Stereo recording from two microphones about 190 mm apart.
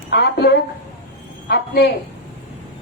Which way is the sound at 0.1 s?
60° left (ahead or behind).